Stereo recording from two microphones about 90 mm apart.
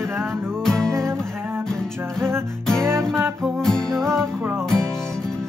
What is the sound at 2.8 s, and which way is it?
Music, 30° right (ahead or behind).